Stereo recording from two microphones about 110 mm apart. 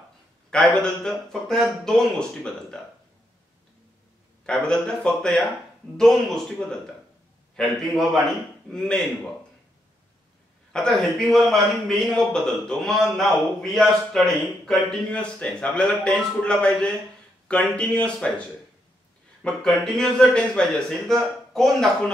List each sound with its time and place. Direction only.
0.5 s a man's voice: 5° left (ahead or behind)
4.5 s a man's voice: 5° left (ahead or behind)
10.7 s a man's voice: 5° left (ahead or behind)
19.4 s a man's voice: 5° left (ahead or behind)